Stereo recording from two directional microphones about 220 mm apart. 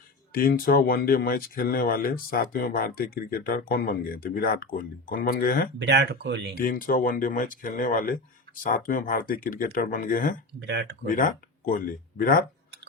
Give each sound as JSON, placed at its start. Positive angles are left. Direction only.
{"t": 0.3, "sound": "speech", "side_deg": 40}
{"t": 5.8, "sound": "speech", "side_deg": -50}
{"t": 6.7, "sound": "speech", "side_deg": 40}
{"t": 10.6, "sound": "speech", "side_deg": -50}
{"t": 11.0, "sound": "speech", "side_deg": 40}